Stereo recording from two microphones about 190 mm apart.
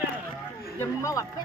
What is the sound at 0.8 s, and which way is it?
Speech, 15° left (ahead or behind).